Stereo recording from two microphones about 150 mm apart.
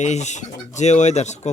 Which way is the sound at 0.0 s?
50° left (ahead or behind).